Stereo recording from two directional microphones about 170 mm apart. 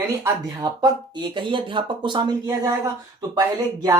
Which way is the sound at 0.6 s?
25° right (ahead or behind).